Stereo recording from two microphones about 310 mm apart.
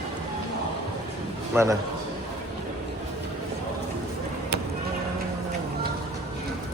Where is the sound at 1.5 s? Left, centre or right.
Centre.